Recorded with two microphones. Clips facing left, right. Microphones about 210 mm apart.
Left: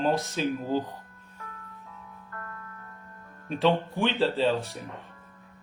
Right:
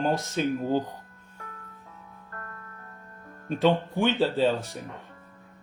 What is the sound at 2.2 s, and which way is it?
Music, 40° right (ahead or behind).